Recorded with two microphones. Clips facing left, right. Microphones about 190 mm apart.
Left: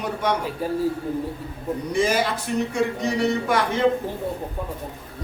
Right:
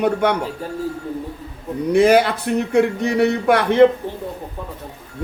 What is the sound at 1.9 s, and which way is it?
A man's voice, 65° right (ahead or behind).